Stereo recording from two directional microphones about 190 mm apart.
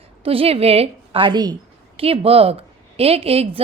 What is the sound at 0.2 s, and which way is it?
A woman's voice, 30° right (ahead or behind).